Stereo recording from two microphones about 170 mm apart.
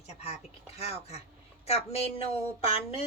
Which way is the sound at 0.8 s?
35° left (ahead or behind).